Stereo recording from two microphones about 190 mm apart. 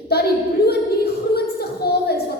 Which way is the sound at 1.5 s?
55° left (ahead or behind).